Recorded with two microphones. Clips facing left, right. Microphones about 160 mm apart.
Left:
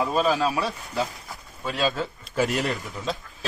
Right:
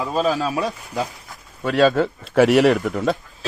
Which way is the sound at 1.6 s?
65° right (ahead or behind).